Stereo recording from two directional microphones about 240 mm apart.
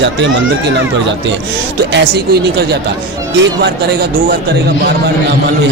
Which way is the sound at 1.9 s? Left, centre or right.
Right.